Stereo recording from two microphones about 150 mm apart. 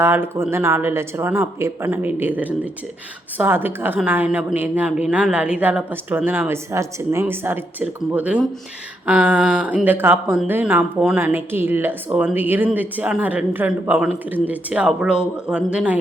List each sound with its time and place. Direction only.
0.0 s speech: 15° right (ahead or behind)